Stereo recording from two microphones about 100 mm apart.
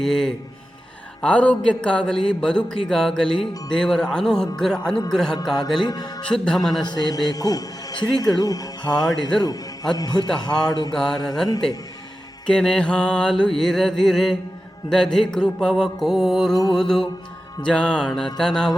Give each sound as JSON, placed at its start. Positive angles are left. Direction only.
{"t": 0.0, "sound": "music", "side_deg": 5}
{"t": 1.2, "sound": "speech", "side_deg": 15}
{"t": 5.1, "sound": "music", "side_deg": 5}
{"t": 5.8, "sound": "a man's voice", "side_deg": 40}
{"t": 6.2, "sound": "music", "side_deg": 10}
{"t": 6.8, "sound": "a man's voice", "side_deg": 45}
{"t": 10.9, "sound": "music", "side_deg": 5}
{"t": 12.5, "sound": "music", "side_deg": 5}
{"t": 17.6, "sound": "speech", "side_deg": 10}